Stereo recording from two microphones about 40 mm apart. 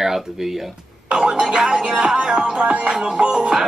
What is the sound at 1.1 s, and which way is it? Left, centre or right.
Music, right.